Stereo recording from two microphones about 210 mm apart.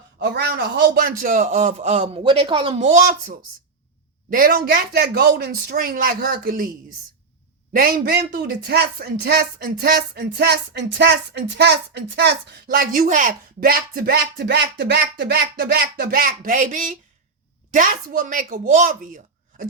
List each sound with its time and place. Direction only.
0.2 s a man's voice: 55° right (ahead or behind)
7.7 s a man's voice: 45° right (ahead or behind)